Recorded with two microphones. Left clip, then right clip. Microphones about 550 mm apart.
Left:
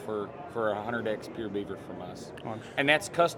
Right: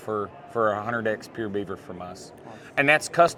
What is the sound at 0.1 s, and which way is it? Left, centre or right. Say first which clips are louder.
Speech: right 6 dB; right.